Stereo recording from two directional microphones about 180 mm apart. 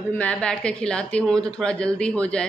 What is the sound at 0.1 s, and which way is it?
Speech, 5° left (ahead or behind).